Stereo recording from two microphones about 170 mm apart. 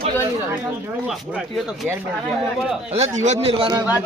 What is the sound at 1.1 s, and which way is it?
Speech, centre (ahead or behind).